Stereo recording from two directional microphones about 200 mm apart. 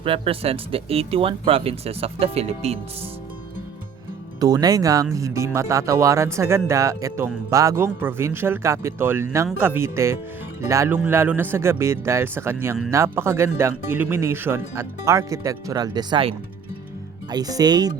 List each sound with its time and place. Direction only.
0.0 s speech: 25° right (ahead or behind)
4.4 s speech: 20° right (ahead or behind)
17.3 s speech: 20° right (ahead or behind)